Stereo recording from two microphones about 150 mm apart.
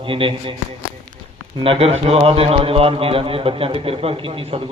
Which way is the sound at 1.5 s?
35° right (ahead or behind).